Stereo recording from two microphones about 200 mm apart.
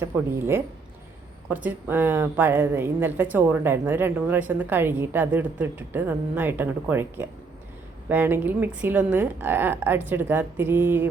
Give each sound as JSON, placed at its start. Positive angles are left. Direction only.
{"t": 0.0, "sound": "a woman's voice", "side_deg": -10}